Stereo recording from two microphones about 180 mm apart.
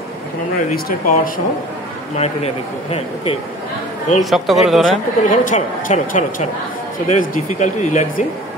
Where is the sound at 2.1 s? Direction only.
35° left (ahead or behind).